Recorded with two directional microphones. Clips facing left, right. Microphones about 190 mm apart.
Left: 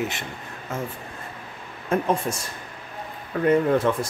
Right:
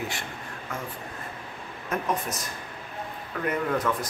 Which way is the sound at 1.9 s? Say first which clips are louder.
Left 6 dB; 30° left (ahead or behind).